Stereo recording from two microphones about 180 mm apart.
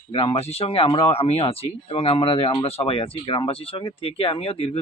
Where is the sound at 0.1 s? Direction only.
30° left (ahead or behind).